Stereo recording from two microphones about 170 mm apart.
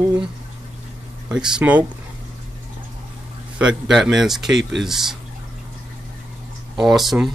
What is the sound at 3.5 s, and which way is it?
Speech, 5° right (ahead or behind).